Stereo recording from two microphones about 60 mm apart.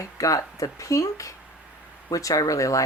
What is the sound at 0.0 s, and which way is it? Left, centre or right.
Speech, left.